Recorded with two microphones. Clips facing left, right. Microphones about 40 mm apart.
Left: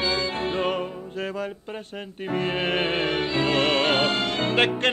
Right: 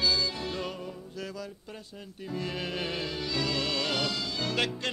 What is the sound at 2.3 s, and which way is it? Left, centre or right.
Music, left.